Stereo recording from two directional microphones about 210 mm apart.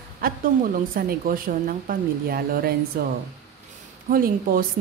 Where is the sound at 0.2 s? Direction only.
45° right (ahead or behind).